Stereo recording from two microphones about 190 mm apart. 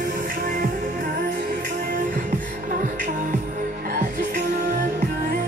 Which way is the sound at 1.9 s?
45° right (ahead or behind).